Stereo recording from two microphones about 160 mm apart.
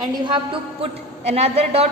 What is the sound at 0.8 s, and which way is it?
A woman's voice, 40° right (ahead or behind).